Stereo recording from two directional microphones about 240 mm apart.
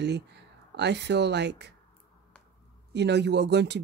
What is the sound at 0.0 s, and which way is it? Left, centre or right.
Speech, right.